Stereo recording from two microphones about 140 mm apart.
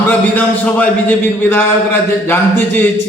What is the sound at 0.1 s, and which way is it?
Speech, 10° left (ahead or behind).